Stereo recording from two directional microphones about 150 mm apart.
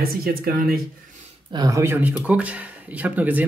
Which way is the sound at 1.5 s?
25° right (ahead or behind).